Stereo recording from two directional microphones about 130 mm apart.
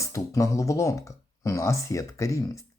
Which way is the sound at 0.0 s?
25° left (ahead or behind).